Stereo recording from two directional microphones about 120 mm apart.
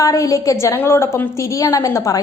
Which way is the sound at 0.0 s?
30° left (ahead or behind).